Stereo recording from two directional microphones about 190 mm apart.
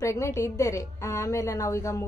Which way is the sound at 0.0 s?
15° left (ahead or behind).